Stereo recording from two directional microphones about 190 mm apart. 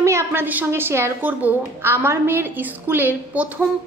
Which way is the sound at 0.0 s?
15° right (ahead or behind).